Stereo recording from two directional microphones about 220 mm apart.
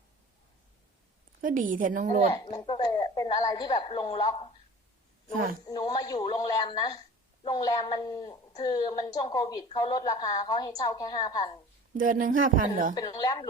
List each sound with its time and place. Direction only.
1.4 s speech: 35° right (ahead or behind)
2.3 s a woman's voice: 20° left (ahead or behind)
5.6 s a woman's voice: 20° left (ahead or behind)
11.9 s speech: 40° right (ahead or behind)
12.9 s a woman's voice: 20° left (ahead or behind)